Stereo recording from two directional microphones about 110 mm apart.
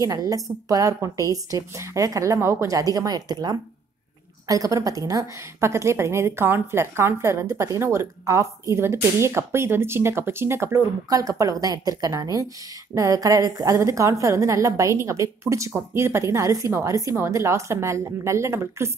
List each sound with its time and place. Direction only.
0.0 s a woman's voice: 30° right (ahead or behind)